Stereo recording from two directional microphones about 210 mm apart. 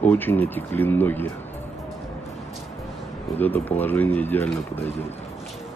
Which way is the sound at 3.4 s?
10° left (ahead or behind).